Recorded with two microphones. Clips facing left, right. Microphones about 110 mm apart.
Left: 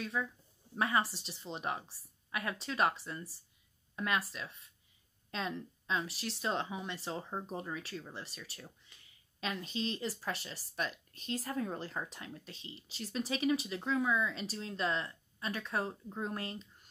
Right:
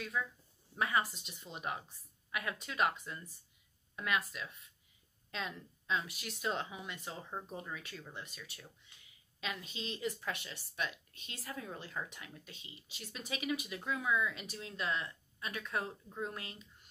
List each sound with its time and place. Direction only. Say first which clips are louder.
0.2 s speech: left 1 dB; 25° left (ahead or behind)